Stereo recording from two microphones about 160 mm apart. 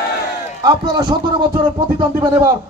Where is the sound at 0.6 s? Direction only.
25° right (ahead or behind).